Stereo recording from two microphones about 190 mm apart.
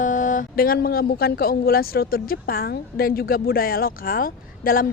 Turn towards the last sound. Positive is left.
turn(degrees=50)  # may be behind; listen again after turning